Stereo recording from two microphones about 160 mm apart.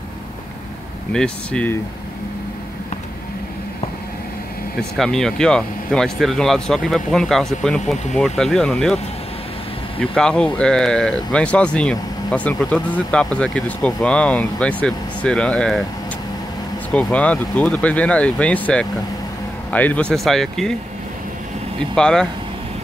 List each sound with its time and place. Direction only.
1.1 s speech: 5° left (ahead or behind)
4.9 s speech: 5° left (ahead or behind)
16.9 s speech: 10° left (ahead or behind)
21.9 s speech: 5° left (ahead or behind)